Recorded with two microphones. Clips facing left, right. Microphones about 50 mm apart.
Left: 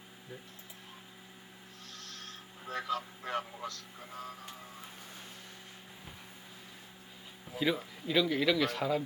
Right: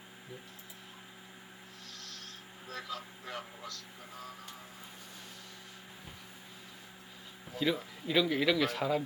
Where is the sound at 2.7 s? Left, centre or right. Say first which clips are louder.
Left 6 dB; left.